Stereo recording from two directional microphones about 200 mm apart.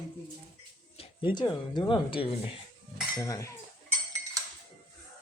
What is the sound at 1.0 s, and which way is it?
Speech, 25° left (ahead or behind).